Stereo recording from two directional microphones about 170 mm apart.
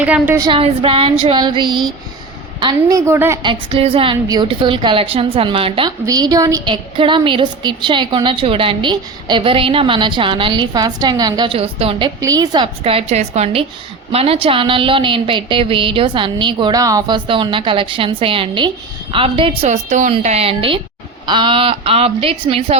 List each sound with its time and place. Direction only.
0.0 s a woman's voice: 10° right (ahead or behind)
0.4 s a woman's voice: 30° right (ahead or behind)
3.1 s a woman's voice: 15° right (ahead or behind)
3.4 s a woman's voice: 30° right (ahead or behind)
6.1 s a woman's voice: 20° right (ahead or behind)
12.2 s a woman's voice: 20° right (ahead or behind)